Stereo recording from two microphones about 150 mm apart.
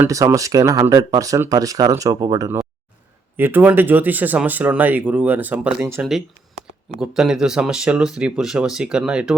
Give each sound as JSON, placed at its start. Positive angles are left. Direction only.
{"t": 0.0, "sound": "speech", "side_deg": -20}
{"t": 3.3, "sound": "speech", "side_deg": -15}
{"t": 6.0, "sound": "speech", "side_deg": 0}